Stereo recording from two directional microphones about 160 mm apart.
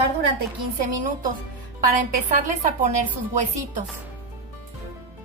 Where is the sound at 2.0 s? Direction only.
55° right (ahead or behind).